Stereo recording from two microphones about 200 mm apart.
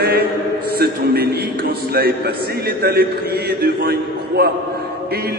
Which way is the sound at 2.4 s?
50° right (ahead or behind).